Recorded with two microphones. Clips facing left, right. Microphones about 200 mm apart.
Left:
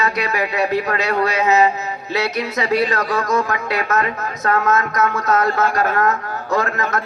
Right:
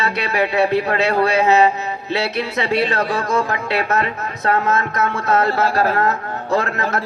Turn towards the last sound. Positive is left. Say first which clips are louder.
# even
turn(degrees=-30)  # may be behind; listen again after turning